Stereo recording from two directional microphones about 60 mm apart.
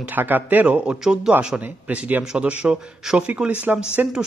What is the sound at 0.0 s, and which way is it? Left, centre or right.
Speech, right.